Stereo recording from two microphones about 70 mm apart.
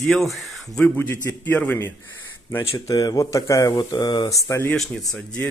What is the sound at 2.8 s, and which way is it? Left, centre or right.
Speech, left.